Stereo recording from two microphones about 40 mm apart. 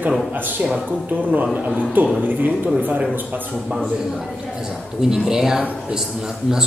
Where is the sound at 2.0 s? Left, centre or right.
Right.